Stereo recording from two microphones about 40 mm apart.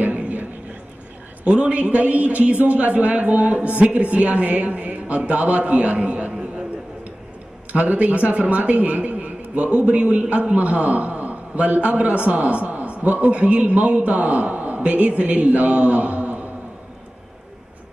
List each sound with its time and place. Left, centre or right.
0.1 s a sound: right
1.4 s a man's voice: right
7.7 s a man's voice: right